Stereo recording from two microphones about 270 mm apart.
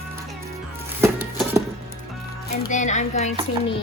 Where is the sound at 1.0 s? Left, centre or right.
Centre.